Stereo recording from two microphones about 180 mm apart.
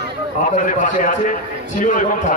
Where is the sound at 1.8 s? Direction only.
45° left (ahead or behind).